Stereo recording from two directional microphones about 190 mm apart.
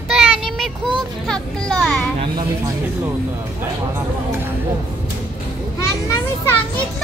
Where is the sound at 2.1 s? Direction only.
20° right (ahead or behind).